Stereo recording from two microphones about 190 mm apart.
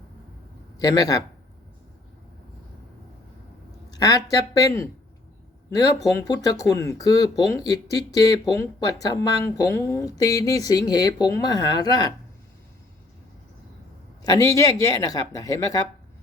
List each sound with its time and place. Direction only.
0.8 s speech: 20° left (ahead or behind)
3.9 s speech: 20° left (ahead or behind)
14.2 s speech: 20° left (ahead or behind)